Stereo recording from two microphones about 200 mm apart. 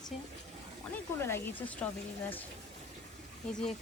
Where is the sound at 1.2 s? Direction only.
10° left (ahead or behind).